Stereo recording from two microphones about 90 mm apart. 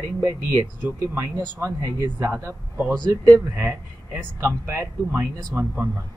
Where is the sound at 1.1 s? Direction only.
30° right (ahead or behind).